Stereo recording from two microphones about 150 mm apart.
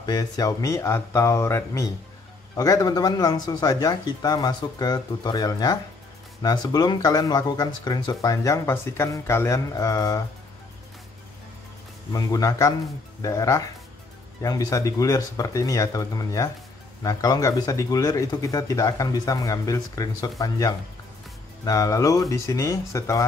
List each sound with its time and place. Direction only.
0.0 s speech: 25° left (ahead or behind)
12.1 s speech: 25° left (ahead or behind)